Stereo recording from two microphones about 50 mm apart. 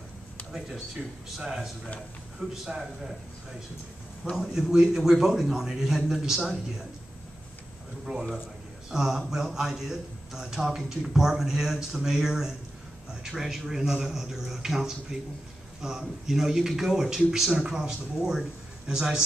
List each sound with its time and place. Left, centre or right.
1.3 s a man's voice: centre
4.4 s a man's voice: centre
8.0 s a man's voice: centre